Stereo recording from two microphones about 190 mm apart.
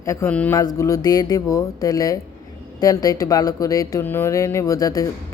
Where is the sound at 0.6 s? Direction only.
20° left (ahead or behind).